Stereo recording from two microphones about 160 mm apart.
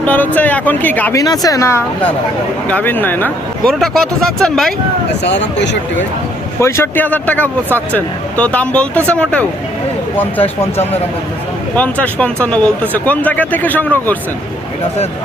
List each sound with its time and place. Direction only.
0.0 s speech: 10° left (ahead or behind)
1.2 s a woman's voice: 25° left (ahead or behind); by 4.7 s 5° left (ahead or behind)
5.2 s speech: 90° left
6.6 s speech: 15° left (ahead or behind)
11.8 s speech: 10° left (ahead or behind)